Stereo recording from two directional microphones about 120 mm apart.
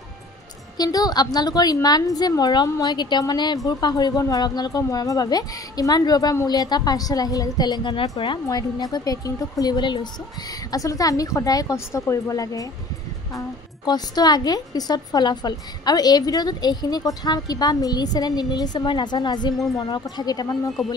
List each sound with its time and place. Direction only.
0.7 s a woman's voice: 30° left (ahead or behind)
8.5 s a woman's voice: 30° left (ahead or behind)
13.8 s a woman's voice: 35° left (ahead or behind)